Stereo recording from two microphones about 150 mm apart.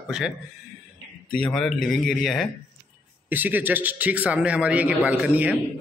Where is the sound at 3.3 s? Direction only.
10° right (ahead or behind).